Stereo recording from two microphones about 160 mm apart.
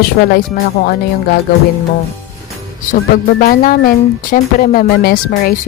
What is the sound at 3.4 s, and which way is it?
Speech, 60° left (ahead or behind).